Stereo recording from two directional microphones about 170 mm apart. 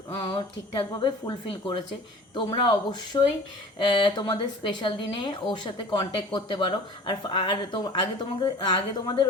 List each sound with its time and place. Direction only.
0.1 s speech: 30° left (ahead or behind)